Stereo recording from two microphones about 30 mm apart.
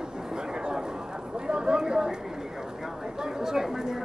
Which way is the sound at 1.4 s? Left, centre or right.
Right.